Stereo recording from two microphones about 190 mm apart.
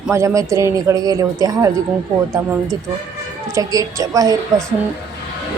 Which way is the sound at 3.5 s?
15° right (ahead or behind).